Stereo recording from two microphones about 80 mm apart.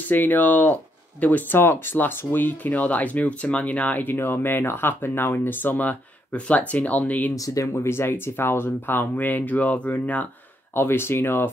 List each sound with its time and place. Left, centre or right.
0.0 s speech: left
7.3 s speech: left